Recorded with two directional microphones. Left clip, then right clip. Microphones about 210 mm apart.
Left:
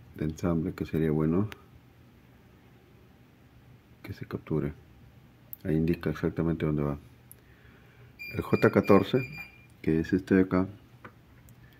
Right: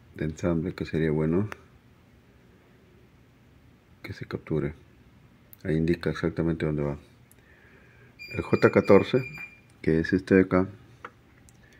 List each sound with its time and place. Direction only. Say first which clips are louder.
0.1 s speech: right 3 dB; 10° right (ahead or behind)
4.0 s speech: right 3 dB; 10° right (ahead or behind)
8.3 s speech: right 3 dB; 5° right (ahead or behind)
9.8 s speech: right 3 dB; 15° right (ahead or behind)